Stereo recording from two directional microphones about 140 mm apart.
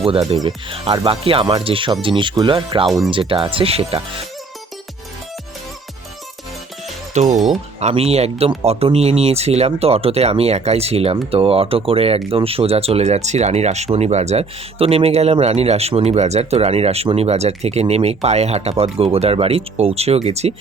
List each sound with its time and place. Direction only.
0.0 s speech: 45° right (ahead or behind)
7.1 s speech: 55° right (ahead or behind)
7.3 s speech: centre (ahead or behind)
7.8 s speech: 50° right (ahead or behind)